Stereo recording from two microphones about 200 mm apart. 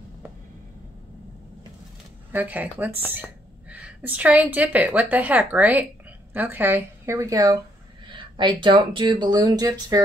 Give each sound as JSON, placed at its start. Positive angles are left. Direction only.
{"t": 2.3, "sound": "a woman's voice", "side_deg": -10}